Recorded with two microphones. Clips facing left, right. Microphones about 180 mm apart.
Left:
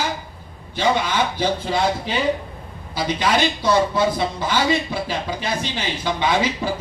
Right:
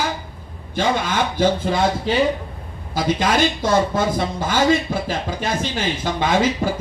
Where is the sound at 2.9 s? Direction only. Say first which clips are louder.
Right 2 dB; 50° right (ahead or behind).